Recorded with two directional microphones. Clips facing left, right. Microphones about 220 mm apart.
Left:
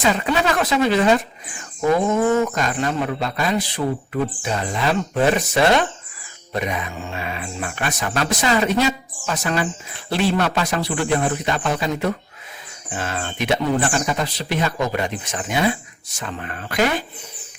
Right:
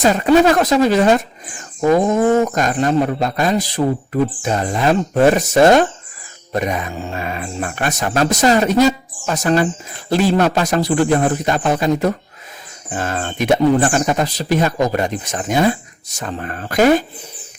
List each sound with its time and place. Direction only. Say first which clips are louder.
0.0 s a man's voice: right 8 dB; 45° right (ahead or behind)